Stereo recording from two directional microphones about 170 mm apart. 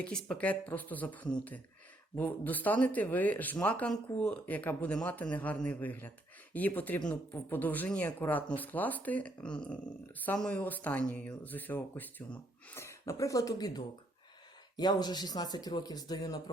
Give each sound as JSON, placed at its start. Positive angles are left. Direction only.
{"t": 0.0, "sound": "speech", "side_deg": 5}